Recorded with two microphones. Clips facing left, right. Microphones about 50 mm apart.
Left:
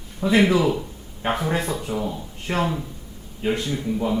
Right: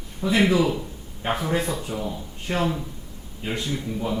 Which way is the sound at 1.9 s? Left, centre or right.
Centre.